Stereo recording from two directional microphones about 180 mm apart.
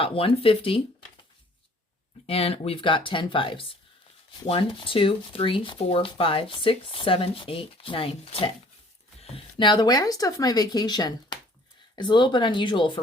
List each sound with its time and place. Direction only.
0.0 s speech: 30° left (ahead or behind)
2.2 s speech: 35° left (ahead or behind)